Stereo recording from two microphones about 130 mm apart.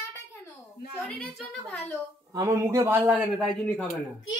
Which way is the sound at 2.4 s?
20° right (ahead or behind).